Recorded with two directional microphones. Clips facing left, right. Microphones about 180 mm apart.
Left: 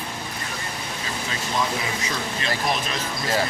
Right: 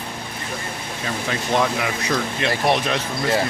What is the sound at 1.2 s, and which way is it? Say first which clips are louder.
Speech: right 6 dB; 60° right (ahead or behind).